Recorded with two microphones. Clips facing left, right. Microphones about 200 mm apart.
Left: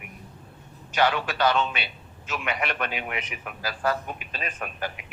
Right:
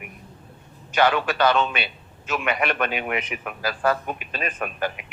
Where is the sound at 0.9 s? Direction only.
60° right (ahead or behind).